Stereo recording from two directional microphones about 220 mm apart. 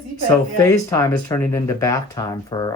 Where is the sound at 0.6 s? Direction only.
15° left (ahead or behind).